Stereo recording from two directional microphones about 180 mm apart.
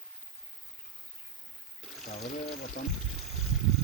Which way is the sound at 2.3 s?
40° left (ahead or behind).